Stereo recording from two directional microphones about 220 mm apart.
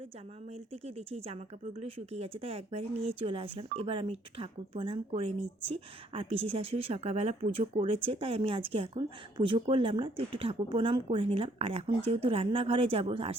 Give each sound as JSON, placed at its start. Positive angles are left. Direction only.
{"t": 0.9, "sound": "speech", "side_deg": -25}